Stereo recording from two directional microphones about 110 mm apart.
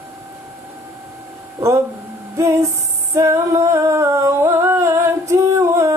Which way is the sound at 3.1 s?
25° right (ahead or behind).